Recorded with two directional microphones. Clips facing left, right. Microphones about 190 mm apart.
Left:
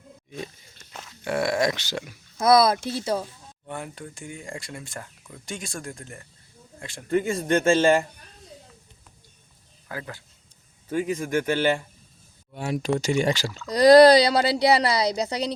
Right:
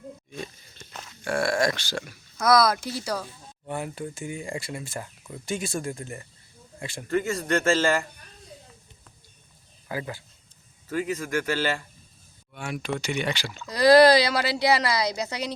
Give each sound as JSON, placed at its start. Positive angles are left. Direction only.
{"t": 0.3, "sound": "speech", "side_deg": 15}
{"t": 3.7, "sound": "speech", "side_deg": -5}
{"t": 7.1, "sound": "a man's voice", "side_deg": 20}
{"t": 9.9, "sound": "speech", "side_deg": -5}
{"t": 11.0, "sound": "a man's voice", "side_deg": 20}
{"t": 12.5, "sound": "speech", "side_deg": 35}